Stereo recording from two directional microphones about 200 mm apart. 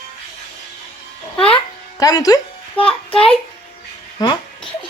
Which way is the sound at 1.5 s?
20° left (ahead or behind).